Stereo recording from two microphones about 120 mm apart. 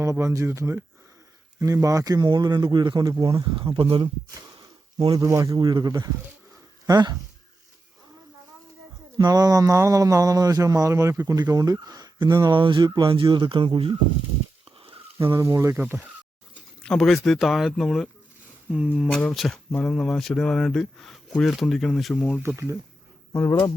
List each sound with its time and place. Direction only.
0.0 s speech: 25° right (ahead or behind); by 4.1 s 50° right (ahead or behind)
4.9 s speech: 30° right (ahead or behind)
9.1 s speech: 35° right (ahead or behind)
14.8 s a sound: 45° right (ahead or behind)
15.4 s speech: 25° right (ahead or behind)
16.8 s speech: 5° left (ahead or behind)
22.4 s speech: 20° right (ahead or behind)
23.3 s speech: 25° left (ahead or behind)